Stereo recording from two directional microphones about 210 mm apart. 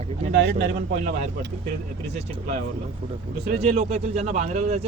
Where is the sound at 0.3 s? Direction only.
55° right (ahead or behind).